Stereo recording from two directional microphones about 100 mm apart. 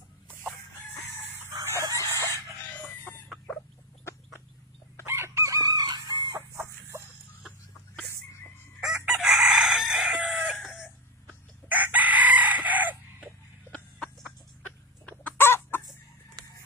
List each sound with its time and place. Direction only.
1.6 s chicken: 30° right (ahead or behind)
5.0 s chicken: 25° right (ahead or behind)
5.8 s chicken: 45° right (ahead or behind)
6.5 s chicken: 30° right (ahead or behind)
8.8 s chicken: 5° right (ahead or behind)
11.7 s chicken: 15° right (ahead or behind)
13.7 s a sound: 10° left (ahead or behind)
15.0 s chicken: 20° left (ahead or behind)